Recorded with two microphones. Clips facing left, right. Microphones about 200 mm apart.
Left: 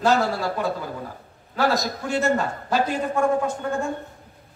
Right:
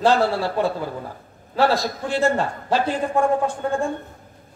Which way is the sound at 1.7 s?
30° right (ahead or behind).